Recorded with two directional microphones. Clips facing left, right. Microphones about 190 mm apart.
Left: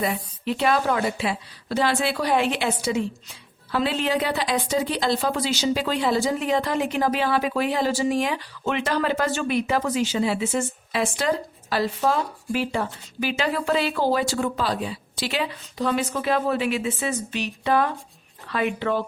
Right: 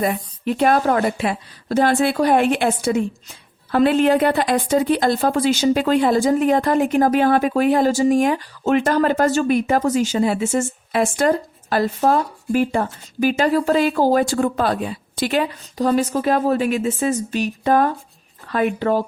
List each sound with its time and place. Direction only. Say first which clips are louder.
0.0 s speech: right 5 dB; 50° right (ahead or behind)